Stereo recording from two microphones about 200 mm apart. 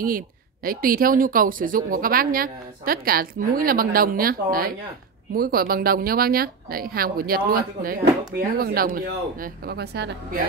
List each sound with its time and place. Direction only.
0.7 s speech: 45° right (ahead or behind)